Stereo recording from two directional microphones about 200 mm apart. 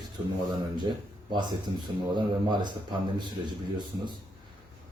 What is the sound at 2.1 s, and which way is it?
A man's voice, 20° right (ahead or behind).